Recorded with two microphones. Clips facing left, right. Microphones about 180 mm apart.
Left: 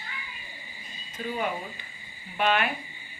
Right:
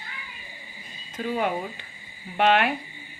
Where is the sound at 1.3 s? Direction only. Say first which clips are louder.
Right 5 dB; 60° right (ahead or behind).